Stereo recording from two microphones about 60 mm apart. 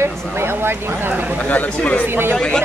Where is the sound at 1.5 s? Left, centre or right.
Left.